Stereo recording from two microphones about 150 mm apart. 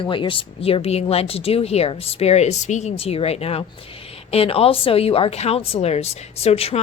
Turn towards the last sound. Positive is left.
turn(degrees=45)  # may be behind; listen again after turning